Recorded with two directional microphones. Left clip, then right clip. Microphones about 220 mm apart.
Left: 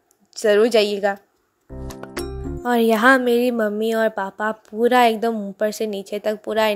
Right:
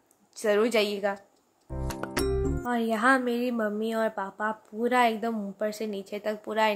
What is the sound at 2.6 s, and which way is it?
Speech, 35° left (ahead or behind).